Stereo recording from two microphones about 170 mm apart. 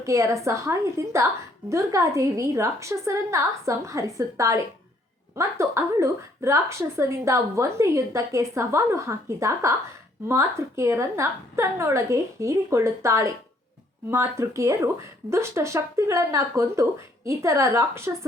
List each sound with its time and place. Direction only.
0.0 s a woman's voice: 20° right (ahead or behind)